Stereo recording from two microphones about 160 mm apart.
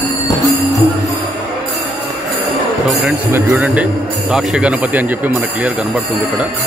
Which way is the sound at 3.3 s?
10° right (ahead or behind).